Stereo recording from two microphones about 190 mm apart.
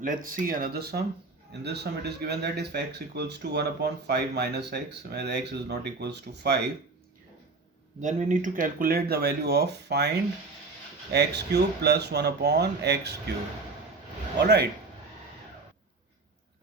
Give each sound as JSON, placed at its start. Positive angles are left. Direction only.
{"t": 0.0, "sound": "speech", "side_deg": -45}
{"t": 8.0, "sound": "speech", "side_deg": -40}
{"t": 11.1, "sound": "speech", "side_deg": -60}
{"t": 14.3, "sound": "speech", "side_deg": -60}